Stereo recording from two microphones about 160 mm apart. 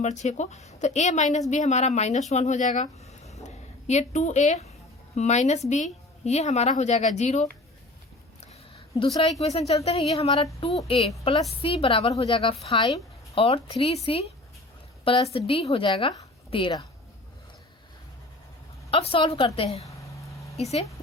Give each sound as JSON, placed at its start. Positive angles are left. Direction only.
{"t": 0.0, "sound": "a woman's voice", "side_deg": 45}
{"t": 2.8, "sound": "a sound", "side_deg": 40}
{"t": 5.1, "sound": "a woman's voice", "side_deg": 45}
{"t": 9.4, "sound": "speech", "side_deg": 40}
{"t": 18.9, "sound": "speech", "side_deg": 35}